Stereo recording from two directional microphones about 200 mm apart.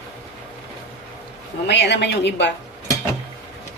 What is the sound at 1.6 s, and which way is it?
Speech, 60° left (ahead or behind).